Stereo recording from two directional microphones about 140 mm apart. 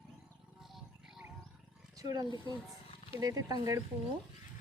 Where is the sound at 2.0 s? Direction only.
25° right (ahead or behind).